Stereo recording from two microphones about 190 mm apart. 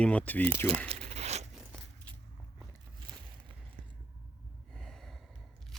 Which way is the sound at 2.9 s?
20° right (ahead or behind).